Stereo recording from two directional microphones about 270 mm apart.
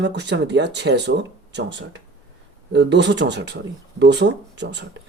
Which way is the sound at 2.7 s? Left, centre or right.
Right.